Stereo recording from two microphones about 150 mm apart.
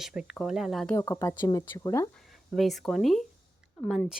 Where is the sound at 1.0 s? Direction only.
25° left (ahead or behind).